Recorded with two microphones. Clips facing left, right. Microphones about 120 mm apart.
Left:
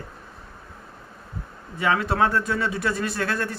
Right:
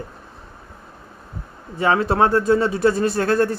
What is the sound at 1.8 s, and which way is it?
Speech, 30° right (ahead or behind).